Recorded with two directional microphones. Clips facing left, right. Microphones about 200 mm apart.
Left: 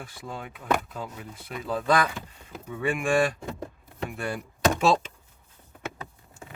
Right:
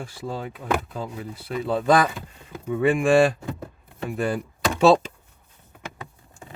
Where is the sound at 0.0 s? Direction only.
30° right (ahead or behind).